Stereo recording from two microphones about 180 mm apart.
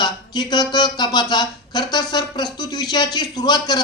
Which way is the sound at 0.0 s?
25° left (ahead or behind).